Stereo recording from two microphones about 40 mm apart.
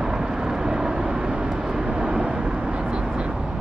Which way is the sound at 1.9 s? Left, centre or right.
Right.